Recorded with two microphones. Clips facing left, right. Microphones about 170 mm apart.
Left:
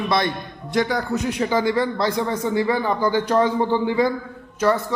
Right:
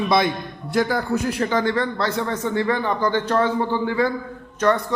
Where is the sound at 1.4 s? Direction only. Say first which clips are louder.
Left 4 dB; 10° left (ahead or behind).